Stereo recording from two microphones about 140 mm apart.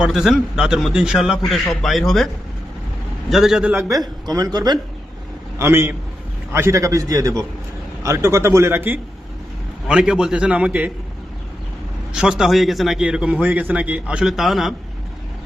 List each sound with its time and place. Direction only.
0.0 s a man's voice: 5° right (ahead or behind)
3.8 s speech: 25° right (ahead or behind)
5.5 s a man's voice: 15° right (ahead or behind)
12.1 s a man's voice: 5° right (ahead or behind)